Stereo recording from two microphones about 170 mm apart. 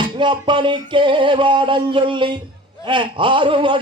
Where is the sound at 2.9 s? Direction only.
30° right (ahead or behind).